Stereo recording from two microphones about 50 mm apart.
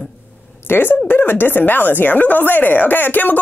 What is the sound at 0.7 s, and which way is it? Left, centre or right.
A woman's voice, left.